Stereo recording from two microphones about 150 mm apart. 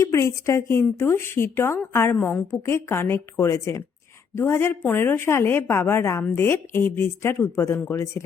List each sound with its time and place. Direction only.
0.0 s a woman's voice: 20° left (ahead or behind)